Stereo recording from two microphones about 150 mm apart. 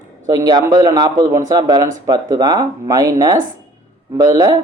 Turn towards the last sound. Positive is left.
turn(degrees=-25)  # may be behind; listen again after turning